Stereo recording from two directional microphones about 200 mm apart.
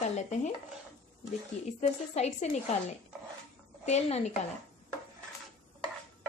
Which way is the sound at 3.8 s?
35° left (ahead or behind).